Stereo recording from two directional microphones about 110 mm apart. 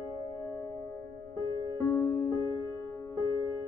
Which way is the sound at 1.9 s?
20° left (ahead or behind).